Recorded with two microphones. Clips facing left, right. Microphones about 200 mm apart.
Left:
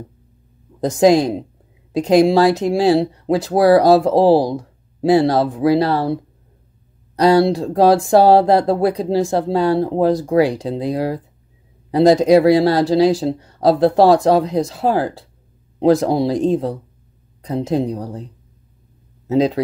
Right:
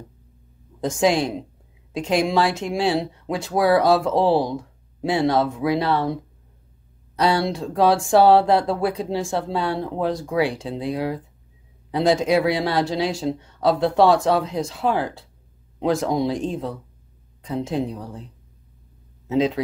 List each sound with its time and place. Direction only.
0.7 s speech: 35° left (ahead or behind)
7.2 s a man's voice: 35° left (ahead or behind)